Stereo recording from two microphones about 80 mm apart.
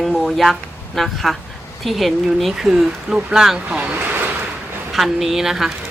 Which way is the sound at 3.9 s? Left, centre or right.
Right.